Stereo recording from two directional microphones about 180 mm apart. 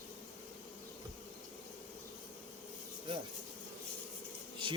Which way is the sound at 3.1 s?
25° right (ahead or behind).